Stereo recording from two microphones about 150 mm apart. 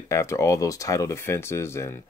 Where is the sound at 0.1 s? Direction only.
20° left (ahead or behind).